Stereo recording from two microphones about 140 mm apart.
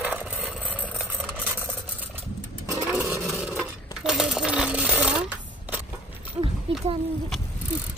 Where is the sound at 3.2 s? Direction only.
Centre (ahead or behind).